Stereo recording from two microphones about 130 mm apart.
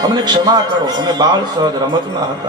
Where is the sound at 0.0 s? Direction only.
30° right (ahead or behind).